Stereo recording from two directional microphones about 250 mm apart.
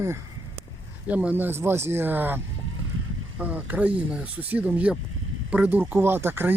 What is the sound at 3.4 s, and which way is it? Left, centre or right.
Speech, centre.